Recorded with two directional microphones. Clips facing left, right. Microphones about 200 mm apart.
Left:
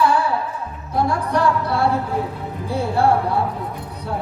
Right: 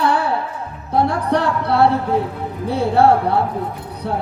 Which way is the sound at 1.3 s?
65° right (ahead or behind).